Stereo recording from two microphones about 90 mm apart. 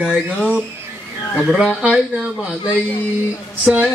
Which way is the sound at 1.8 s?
15° right (ahead or behind).